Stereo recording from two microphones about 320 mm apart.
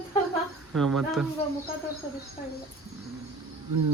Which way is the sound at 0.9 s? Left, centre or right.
Centre.